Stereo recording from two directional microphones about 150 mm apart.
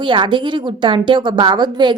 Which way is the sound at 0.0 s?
30° right (ahead or behind).